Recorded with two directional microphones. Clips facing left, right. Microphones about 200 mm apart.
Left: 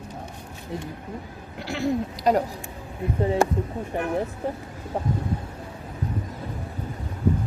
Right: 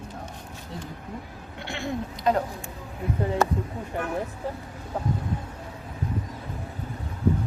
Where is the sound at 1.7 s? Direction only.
40° left (ahead or behind).